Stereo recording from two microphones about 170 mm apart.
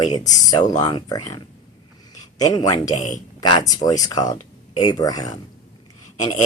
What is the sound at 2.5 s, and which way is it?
Speech, 20° left (ahead or behind).